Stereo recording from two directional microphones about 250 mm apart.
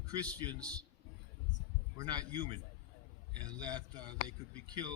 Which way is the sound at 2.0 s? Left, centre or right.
Centre.